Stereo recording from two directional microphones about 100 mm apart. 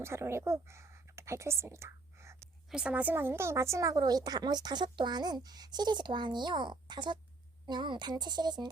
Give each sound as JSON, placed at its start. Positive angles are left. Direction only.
{"t": 0.0, "sound": "speech", "side_deg": -25}
{"t": 2.6, "sound": "speech", "side_deg": -10}